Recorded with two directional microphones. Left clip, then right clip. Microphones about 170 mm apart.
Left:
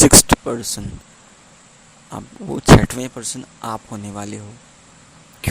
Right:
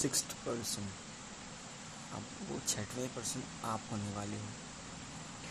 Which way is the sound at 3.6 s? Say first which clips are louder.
Left 13 dB; 60° left (ahead or behind).